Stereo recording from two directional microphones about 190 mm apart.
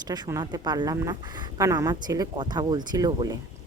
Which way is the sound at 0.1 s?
20° right (ahead or behind).